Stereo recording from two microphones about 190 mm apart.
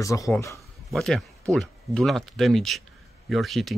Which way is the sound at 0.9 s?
Centre (ahead or behind).